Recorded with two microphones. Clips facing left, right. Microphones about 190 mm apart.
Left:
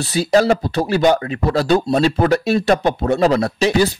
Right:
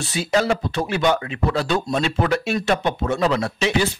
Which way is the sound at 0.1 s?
35° left (ahead or behind).